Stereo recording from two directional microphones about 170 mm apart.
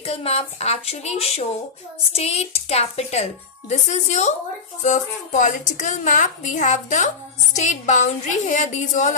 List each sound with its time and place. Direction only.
0.0 s a woman's voice: 35° left (ahead or behind)